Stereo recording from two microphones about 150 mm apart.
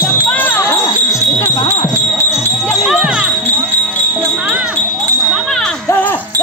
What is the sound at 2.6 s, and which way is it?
Jingle bell, centre (ahead or behind).